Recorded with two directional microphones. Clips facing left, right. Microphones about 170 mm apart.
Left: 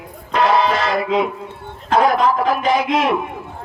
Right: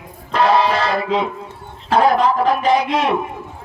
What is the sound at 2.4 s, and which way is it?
Speech, 35° right (ahead or behind).